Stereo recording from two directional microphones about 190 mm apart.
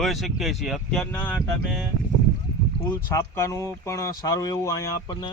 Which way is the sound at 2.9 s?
15° left (ahead or behind).